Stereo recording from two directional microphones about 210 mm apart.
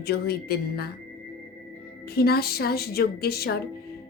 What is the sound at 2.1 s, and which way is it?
A woman's voice, 50° left (ahead or behind).